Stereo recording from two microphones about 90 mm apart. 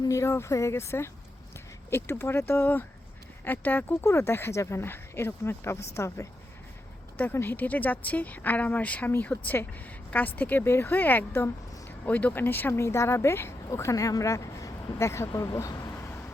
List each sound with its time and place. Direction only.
0.0 s speech: 35° left (ahead or behind)